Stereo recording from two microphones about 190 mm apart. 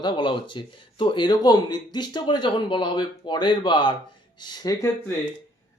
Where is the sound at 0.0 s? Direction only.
25° left (ahead or behind).